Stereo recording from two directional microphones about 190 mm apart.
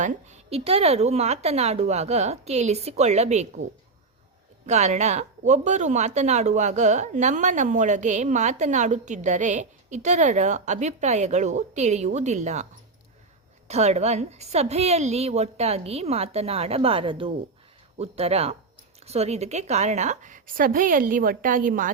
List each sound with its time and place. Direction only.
0.0 s speech: 40° right (ahead or behind)
4.6 s speech: 35° right (ahead or behind)
13.7 s a woman's voice: 35° right (ahead or behind)